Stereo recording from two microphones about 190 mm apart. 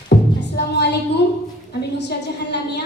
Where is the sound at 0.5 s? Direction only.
65° left (ahead or behind).